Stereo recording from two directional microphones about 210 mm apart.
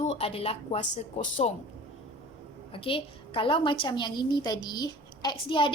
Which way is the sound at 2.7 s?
25° left (ahead or behind).